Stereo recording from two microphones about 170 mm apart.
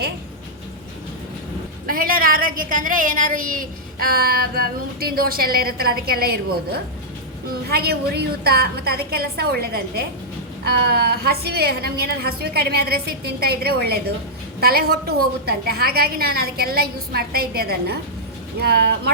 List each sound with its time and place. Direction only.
1.9 s a woman's voice: 60° right (ahead or behind)